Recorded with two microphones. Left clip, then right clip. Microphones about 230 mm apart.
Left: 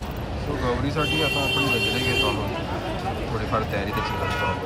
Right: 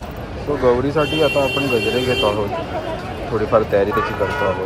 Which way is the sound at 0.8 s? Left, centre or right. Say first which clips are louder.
Right 7 dB; centre.